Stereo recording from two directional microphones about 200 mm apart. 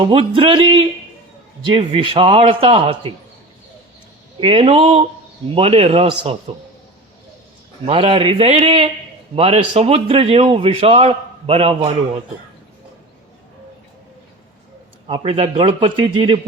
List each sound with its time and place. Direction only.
0.0 s a man's voice: 25° right (ahead or behind)
4.4 s a man's voice: 25° right (ahead or behind)
7.9 s a man's voice: 25° right (ahead or behind)
15.0 s a man's voice: 25° right (ahead or behind)